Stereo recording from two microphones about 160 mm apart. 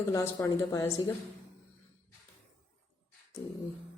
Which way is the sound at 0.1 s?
20° left (ahead or behind).